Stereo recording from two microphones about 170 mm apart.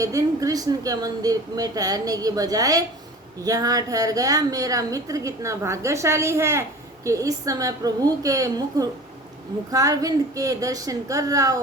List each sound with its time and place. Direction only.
0.0 s a woman's voice: 20° right (ahead or behind)